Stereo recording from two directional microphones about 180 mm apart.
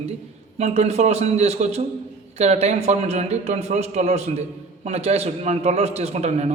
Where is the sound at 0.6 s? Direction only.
35° right (ahead or behind).